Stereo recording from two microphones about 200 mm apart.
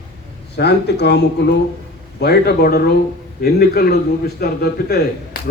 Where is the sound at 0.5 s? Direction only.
55° left (ahead or behind).